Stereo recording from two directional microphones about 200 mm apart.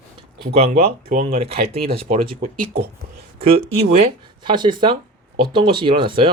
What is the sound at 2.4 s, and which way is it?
Speech, 50° right (ahead or behind).